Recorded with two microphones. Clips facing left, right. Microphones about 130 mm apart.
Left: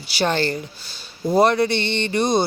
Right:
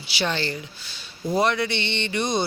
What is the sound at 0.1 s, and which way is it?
Speech, 45° left (ahead or behind).